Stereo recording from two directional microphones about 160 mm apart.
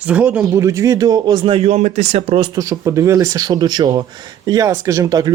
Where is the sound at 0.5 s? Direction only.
20° right (ahead or behind); by 2.5 s 35° right (ahead or behind).